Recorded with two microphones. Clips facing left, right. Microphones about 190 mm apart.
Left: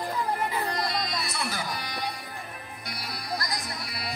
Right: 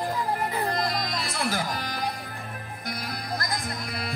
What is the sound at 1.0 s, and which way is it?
Music, 50° right (ahead or behind).